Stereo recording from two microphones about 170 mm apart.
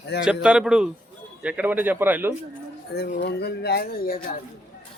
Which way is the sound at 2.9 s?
70° left (ahead or behind).